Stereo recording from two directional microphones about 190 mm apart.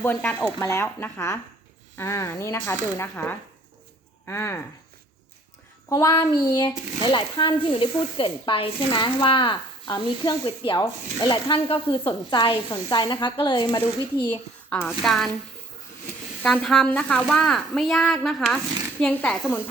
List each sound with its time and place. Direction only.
0.0 s speech: 10° left (ahead or behind)
5.9 s speech: 15° left (ahead or behind)
14.7 s speech: 10° left (ahead or behind)
15.0 s a woman's voice: centre (ahead or behind)
16.4 s a woman's voice: 5° left (ahead or behind)